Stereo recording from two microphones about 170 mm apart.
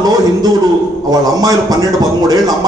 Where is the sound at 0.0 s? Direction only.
25° right (ahead or behind).